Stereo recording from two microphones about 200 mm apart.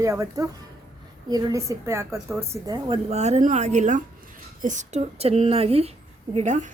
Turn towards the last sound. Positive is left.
turn(degrees=-35)  # may be behind; listen again after turning